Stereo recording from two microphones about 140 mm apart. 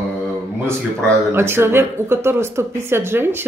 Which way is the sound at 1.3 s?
15° right (ahead or behind).